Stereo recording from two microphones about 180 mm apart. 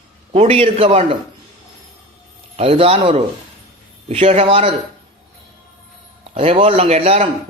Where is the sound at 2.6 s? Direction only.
30° right (ahead or behind).